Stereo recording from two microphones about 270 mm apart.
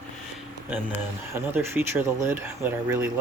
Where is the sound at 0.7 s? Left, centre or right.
Centre.